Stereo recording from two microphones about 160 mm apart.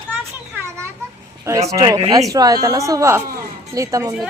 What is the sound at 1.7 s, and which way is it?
Speech, 25° right (ahead or behind).